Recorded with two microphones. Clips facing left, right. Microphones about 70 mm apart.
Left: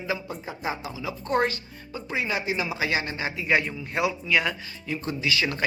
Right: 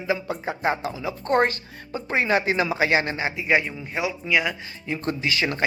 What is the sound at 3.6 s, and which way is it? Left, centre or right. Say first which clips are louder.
Speech: left 1 dB; centre.